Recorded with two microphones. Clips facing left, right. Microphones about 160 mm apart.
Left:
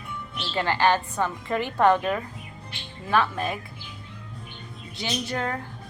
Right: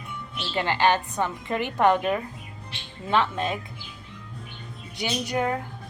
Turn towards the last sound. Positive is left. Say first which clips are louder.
# right 3 dB
turn(degrees=-15)  # may be behind; listen again after turning